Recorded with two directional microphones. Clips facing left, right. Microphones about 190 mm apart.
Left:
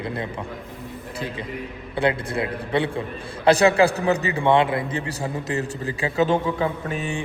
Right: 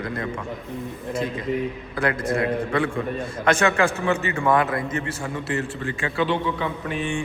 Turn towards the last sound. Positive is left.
turn(degrees=40)  # may be behind; listen again after turning